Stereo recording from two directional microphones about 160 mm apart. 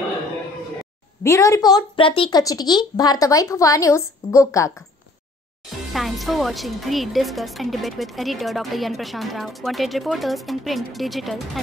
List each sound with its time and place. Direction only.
1.2 s a woman's voice: 20° left (ahead or behind)
5.9 s speech: centre (ahead or behind)